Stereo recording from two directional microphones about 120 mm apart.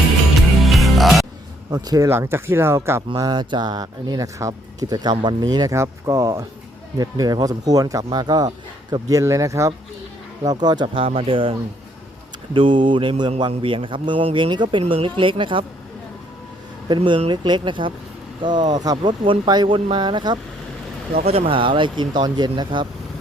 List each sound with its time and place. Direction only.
0.6 s music: centre (ahead or behind)
1.7 s speech: 30° right (ahead or behind)
3.2 s speech: 35° right (ahead or behind)
12.5 s speech: 45° right (ahead or behind)
16.9 s speech: 45° right (ahead or behind)
21.2 s speech: 55° right (ahead or behind); by 22.9 s 40° right (ahead or behind)